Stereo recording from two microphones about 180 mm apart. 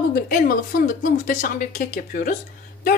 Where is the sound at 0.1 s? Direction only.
50° left (ahead or behind).